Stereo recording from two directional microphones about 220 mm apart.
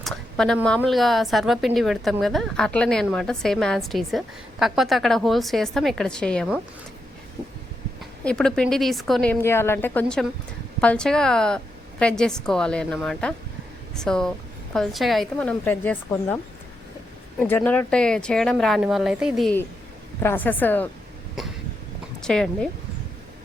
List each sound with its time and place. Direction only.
0.0 s a sound: 5° left (ahead or behind)
0.8 s speech: centre (ahead or behind)
8.2 s speech: 5° left (ahead or behind)
17.4 s a woman's voice: 10° left (ahead or behind)
22.2 s speech: 5° left (ahead or behind)